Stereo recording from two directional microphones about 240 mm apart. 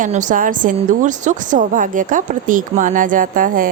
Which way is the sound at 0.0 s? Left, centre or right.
Right.